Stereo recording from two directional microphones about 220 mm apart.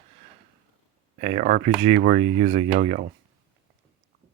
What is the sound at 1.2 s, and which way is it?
Speech, 30° right (ahead or behind).